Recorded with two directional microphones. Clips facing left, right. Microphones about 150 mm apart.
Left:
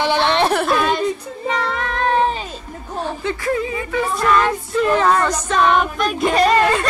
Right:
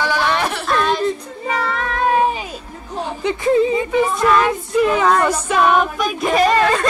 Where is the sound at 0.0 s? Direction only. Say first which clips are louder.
Left 2 dB; 25° left (ahead or behind).